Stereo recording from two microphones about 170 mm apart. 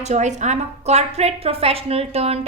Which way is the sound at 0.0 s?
40° right (ahead or behind).